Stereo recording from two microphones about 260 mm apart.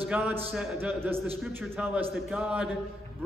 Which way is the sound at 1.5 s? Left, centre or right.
Centre.